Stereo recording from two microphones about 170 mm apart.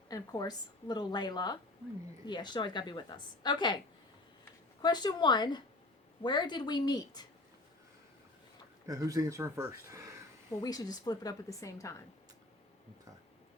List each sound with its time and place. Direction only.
0.1 s a woman's voice: 25° left (ahead or behind)
4.8 s a woman's voice: 25° left (ahead or behind)
8.9 s speech: 20° right (ahead or behind)
10.6 s a woman's voice: 20° left (ahead or behind)